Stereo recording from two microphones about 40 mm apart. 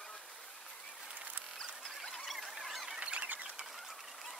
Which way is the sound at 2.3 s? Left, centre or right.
Centre.